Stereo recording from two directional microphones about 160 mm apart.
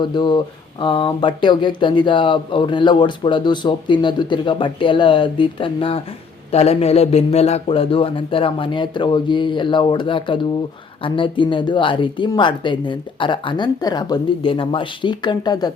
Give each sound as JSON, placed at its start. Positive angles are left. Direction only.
{"t": 0.0, "sound": "speech", "side_deg": 30}